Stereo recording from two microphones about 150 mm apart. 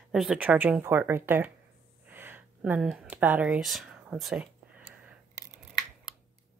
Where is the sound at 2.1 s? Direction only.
15° right (ahead or behind).